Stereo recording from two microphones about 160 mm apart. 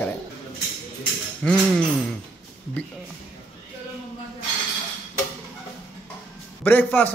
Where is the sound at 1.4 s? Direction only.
5° left (ahead or behind).